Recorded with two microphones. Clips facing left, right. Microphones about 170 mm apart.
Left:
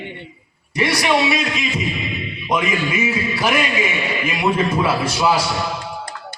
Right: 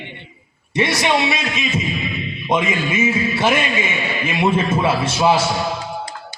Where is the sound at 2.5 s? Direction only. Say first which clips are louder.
Right 1 dB; 25° right (ahead or behind).